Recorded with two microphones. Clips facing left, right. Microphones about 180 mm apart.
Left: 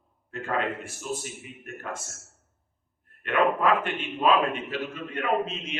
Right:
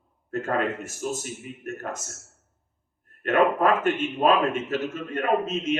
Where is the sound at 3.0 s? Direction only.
45° right (ahead or behind).